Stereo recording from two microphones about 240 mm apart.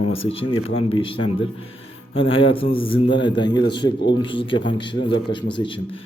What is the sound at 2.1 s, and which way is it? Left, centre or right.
A man's voice, left.